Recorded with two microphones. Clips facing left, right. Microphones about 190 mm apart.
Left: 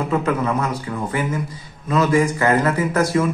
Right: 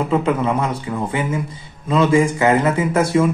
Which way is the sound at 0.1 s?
25° right (ahead or behind).